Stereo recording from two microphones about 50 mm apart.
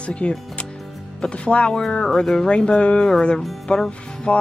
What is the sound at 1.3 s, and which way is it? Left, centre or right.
Speech, left.